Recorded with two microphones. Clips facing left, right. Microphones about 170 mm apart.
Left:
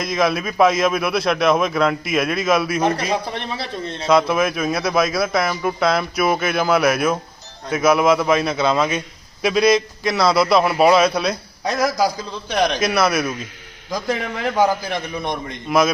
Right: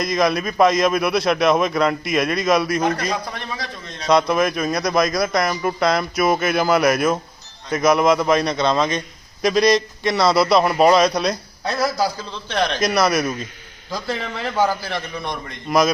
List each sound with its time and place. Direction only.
0.0 s a man's voice: centre (ahead or behind)
3.3 s a man's voice: 25° left (ahead or behind)
4.1 s a man's voice: centre (ahead or behind)
11.6 s a man's voice: 15° left (ahead or behind)
12.8 s a man's voice: centre (ahead or behind)
13.9 s a man's voice: 15° left (ahead or behind)